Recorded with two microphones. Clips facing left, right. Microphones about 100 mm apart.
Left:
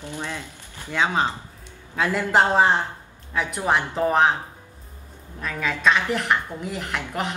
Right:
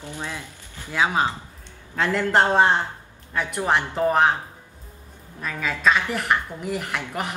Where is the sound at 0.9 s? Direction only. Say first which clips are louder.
Even; 5° right (ahead or behind).